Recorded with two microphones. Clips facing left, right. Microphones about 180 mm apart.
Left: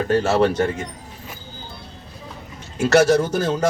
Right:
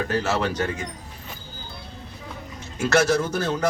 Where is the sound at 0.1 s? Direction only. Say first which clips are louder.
Left 7 dB; 30° left (ahead or behind).